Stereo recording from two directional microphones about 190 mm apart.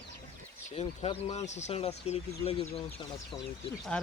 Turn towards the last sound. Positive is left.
turn(degrees=5)  # may be behind; listen again after turning